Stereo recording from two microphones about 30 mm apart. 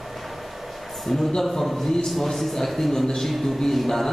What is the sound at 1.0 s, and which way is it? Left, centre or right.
A man's voice, centre.